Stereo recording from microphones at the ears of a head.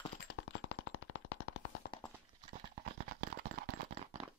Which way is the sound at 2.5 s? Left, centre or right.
Right.